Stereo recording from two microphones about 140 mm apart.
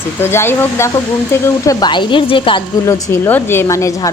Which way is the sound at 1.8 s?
35° left (ahead or behind).